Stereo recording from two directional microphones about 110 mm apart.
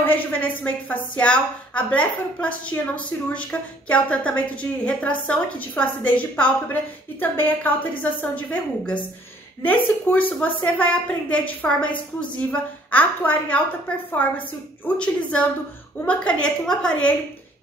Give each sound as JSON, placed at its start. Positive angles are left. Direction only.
{"t": 0.0, "sound": "a woman's voice", "side_deg": 15}